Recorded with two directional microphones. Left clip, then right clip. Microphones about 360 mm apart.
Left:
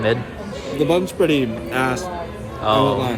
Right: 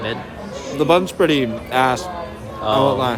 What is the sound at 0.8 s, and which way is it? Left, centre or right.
A man's voice, centre.